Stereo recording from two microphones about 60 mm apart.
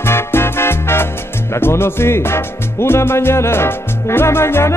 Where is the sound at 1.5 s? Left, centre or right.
Left.